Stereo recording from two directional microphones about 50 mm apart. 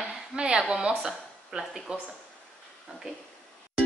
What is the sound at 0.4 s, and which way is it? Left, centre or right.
A woman's voice, centre.